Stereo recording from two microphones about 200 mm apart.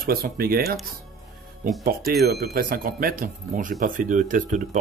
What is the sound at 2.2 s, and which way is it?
Speech, 50° right (ahead or behind).